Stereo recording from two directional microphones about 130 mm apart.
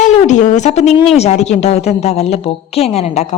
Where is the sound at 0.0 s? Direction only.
70° left (ahead or behind).